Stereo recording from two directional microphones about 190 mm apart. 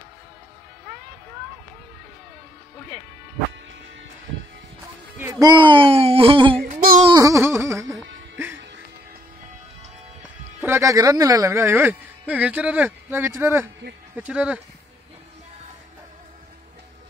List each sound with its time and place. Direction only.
5.1 s speech: 15° right (ahead or behind)
6.7 s music: 45° right (ahead or behind)
7.1 s music: 15° right (ahead or behind)
10.6 s speech: 15° right (ahead or behind)